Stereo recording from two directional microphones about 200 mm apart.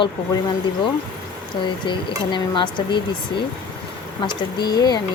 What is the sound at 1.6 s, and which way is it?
Speech, 25° left (ahead or behind).